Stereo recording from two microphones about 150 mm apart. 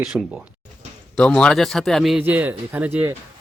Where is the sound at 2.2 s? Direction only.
10° right (ahead or behind).